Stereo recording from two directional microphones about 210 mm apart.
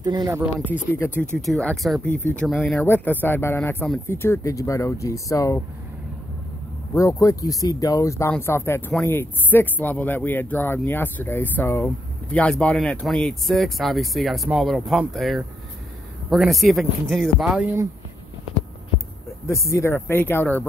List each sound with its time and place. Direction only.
0.0 s speech: 20° right (ahead or behind)
0.9 s speech: 10° left (ahead or behind)
6.9 s speech: 15° left (ahead or behind); by 17.8 s 5° right (ahead or behind)
19.4 s speech: 15° left (ahead or behind)